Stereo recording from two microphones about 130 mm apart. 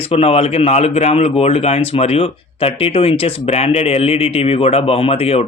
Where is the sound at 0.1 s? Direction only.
50° left (ahead or behind).